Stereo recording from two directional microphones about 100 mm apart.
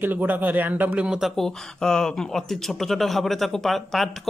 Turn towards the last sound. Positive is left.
turn(degrees=0)  # may be behind; listen again after turning